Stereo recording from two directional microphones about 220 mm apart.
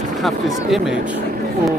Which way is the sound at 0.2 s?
Centre (ahead or behind).